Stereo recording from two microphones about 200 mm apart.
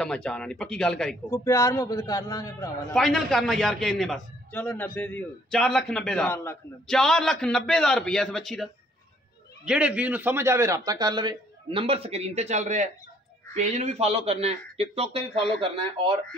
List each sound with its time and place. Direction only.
0.0 s a man's voice: 5° left (ahead or behind)
1.3 s a man's voice: 15° left (ahead or behind)
2.9 s a man's voice: centre (ahead or behind)
6.9 s a man's voice: centre (ahead or behind)
9.7 s a man's voice: 5° right (ahead or behind); by 16.1 s 25° right (ahead or behind)